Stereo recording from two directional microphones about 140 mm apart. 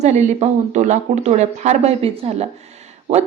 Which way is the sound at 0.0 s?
55° right (ahead or behind).